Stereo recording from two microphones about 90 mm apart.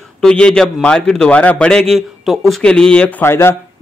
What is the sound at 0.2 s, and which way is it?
A man's voice, 10° left (ahead or behind).